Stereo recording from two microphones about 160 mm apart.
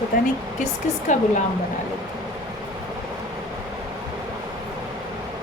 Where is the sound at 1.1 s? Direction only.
50° left (ahead or behind).